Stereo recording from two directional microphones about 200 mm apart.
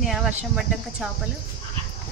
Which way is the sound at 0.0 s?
Centre (ahead or behind).